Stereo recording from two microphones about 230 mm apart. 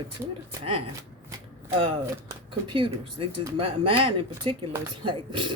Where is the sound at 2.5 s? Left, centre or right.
Right.